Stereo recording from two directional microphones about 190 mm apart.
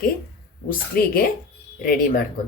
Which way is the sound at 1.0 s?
50° left (ahead or behind).